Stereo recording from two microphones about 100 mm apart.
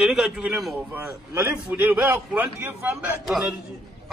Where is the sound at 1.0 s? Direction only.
20° right (ahead or behind).